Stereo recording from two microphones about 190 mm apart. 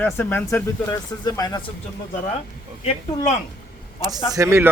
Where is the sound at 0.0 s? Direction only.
10° left (ahead or behind).